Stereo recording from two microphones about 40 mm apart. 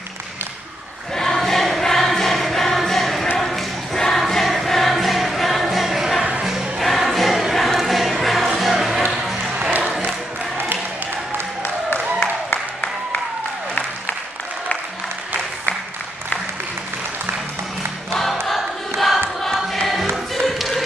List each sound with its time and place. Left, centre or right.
1.1 s choir: centre
3.3 s a sound: centre
4.2 s choir: centre
8.7 s music: centre
9.1 s a sound: centre
9.6 s music: right
11.9 s applause: left
18.5 s a sound: centre
20.3 s tap: centre